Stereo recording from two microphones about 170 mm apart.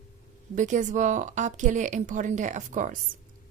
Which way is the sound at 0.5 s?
45° right (ahead or behind).